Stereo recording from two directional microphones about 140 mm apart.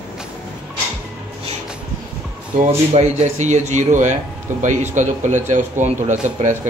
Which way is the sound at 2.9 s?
55° right (ahead or behind).